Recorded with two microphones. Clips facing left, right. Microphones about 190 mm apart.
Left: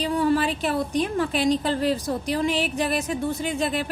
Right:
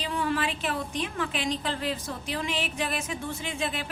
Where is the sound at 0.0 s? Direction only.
40° left (ahead or behind).